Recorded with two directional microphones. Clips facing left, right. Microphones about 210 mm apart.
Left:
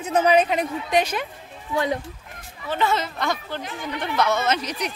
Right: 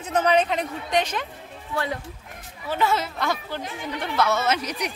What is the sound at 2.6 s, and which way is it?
Speech, 5° right (ahead or behind).